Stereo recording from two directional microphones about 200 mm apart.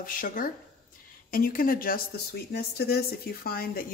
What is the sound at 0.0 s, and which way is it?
A woman's voice, 45° left (ahead or behind).